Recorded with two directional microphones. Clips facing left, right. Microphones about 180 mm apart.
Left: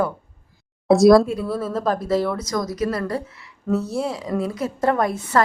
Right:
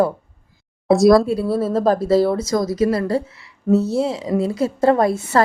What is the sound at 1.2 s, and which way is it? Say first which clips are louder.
Speech: right 5 dB; 35° right (ahead or behind).